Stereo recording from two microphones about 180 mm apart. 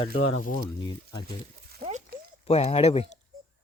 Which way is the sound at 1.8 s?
55° right (ahead or behind).